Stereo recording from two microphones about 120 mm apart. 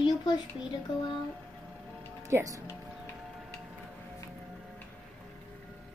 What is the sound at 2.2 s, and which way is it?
Speech, 25° right (ahead or behind).